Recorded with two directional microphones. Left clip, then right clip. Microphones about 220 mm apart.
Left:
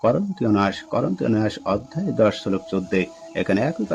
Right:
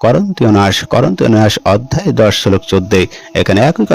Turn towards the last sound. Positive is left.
turn(degrees=-45)  # may be behind; listen again after turning